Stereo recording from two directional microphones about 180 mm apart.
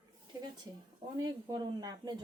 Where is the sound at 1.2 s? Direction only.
20° right (ahead or behind).